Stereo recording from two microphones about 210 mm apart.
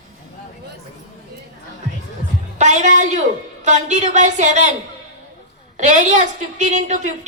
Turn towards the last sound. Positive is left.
turn(degrees=-35)  # may be behind; listen again after turning